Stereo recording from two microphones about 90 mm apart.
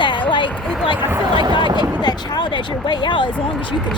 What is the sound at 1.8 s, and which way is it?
Speech, 55° left (ahead or behind).